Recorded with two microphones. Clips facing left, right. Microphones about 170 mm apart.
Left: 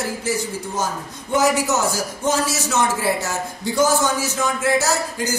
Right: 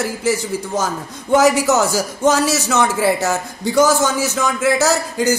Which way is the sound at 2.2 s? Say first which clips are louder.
Right 6 dB; 75° right (ahead or behind).